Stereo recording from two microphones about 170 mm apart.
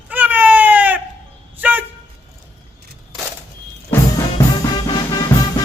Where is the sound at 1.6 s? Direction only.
10° right (ahead or behind).